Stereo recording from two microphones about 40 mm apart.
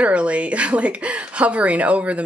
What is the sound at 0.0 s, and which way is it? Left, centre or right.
Speech, right.